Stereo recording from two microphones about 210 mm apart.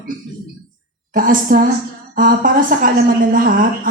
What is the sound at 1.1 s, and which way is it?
A woman's voice, 40° right (ahead or behind).